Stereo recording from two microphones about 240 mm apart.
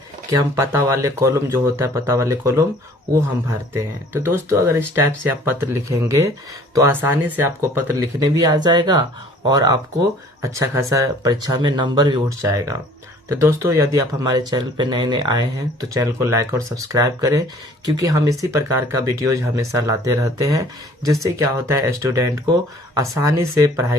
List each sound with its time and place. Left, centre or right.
0.3 s speech: centre
3.7 s speech: centre